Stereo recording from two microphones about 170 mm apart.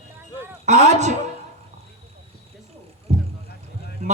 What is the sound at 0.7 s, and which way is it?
Speech, 45° right (ahead or behind).